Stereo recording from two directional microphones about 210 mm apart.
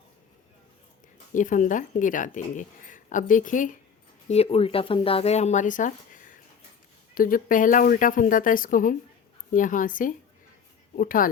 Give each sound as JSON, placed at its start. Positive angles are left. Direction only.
{"t": 1.3, "sound": "speech", "side_deg": 40}
{"t": 4.3, "sound": "speech", "side_deg": 30}